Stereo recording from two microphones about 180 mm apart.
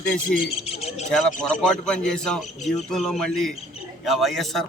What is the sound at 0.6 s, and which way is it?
Bird, 35° left (ahead or behind).